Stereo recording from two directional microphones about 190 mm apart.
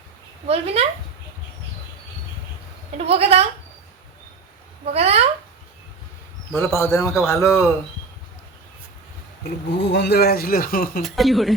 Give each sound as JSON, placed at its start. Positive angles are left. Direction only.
{"t": 0.4, "sound": "a woman's voice", "side_deg": -30}
{"t": 3.0, "sound": "a woman's voice", "side_deg": -30}
{"t": 4.9, "sound": "a woman's voice", "side_deg": -30}
{"t": 6.7, "sound": "a man's voice", "side_deg": 15}
{"t": 9.4, "sound": "speech", "side_deg": 65}
{"t": 11.0, "sound": "speech", "side_deg": 0}